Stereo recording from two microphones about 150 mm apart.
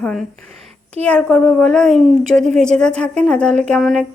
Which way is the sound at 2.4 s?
50° right (ahead or behind).